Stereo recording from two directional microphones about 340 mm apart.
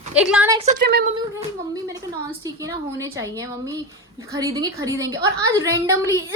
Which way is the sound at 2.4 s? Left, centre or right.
Centre.